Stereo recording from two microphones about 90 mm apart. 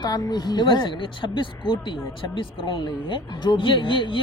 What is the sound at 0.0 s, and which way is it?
Speech, 50° left (ahead or behind).